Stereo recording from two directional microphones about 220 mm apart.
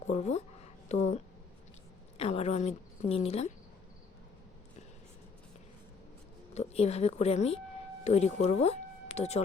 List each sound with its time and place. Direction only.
0.1 s a sound: 30° left (ahead or behind)
2.1 s a woman's voice: 30° left (ahead or behind)
6.5 s speech: 30° left (ahead or behind)